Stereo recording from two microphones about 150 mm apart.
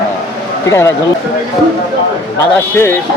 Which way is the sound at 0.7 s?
20° left (ahead or behind).